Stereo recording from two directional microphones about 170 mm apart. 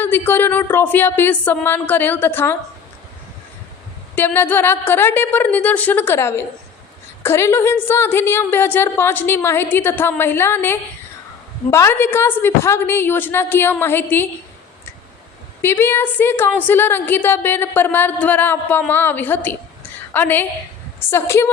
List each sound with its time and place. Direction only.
0.0 s a woman's voice: 10° left (ahead or behind)
4.1 s a woman's voice: 10° left (ahead or behind)
15.6 s a woman's voice: 15° left (ahead or behind)